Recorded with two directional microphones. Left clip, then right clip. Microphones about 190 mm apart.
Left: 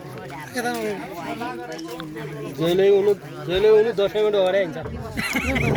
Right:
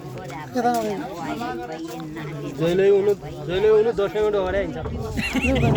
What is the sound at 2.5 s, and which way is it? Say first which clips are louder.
Speech: even; 50° left (ahead or behind).